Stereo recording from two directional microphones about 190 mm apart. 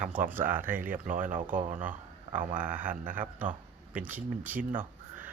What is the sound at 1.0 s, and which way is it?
Speech, 45° right (ahead or behind).